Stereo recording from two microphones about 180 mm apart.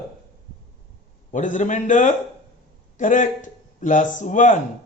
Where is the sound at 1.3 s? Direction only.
45° left (ahead or behind).